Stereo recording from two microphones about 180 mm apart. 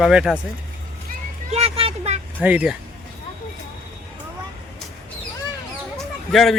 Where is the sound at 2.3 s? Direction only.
10° right (ahead or behind).